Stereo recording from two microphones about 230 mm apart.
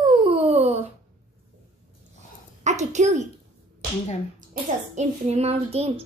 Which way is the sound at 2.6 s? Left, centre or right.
Right.